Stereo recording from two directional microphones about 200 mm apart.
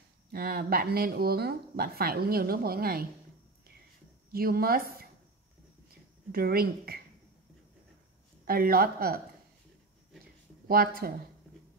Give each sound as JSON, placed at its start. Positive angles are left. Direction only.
{"t": 0.3, "sound": "speech", "side_deg": -50}
{"t": 4.3, "sound": "speech", "side_deg": -50}
{"t": 6.3, "sound": "speech", "side_deg": -50}
{"t": 8.5, "sound": "speech", "side_deg": -45}
{"t": 10.7, "sound": "speech", "side_deg": -45}